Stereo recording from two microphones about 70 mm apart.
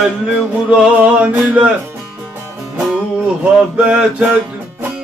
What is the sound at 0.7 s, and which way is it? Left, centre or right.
Music, centre.